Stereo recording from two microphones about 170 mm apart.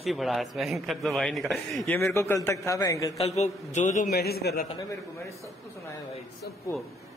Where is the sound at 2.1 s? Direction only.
15° left (ahead or behind).